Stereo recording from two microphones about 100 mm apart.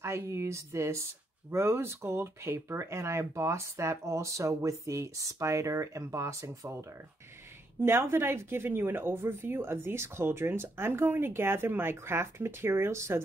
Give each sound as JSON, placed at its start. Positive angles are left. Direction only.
{"t": 0.0, "sound": "speech", "side_deg": -25}